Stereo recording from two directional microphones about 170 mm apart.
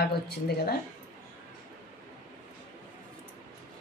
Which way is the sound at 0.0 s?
70° left (ahead or behind).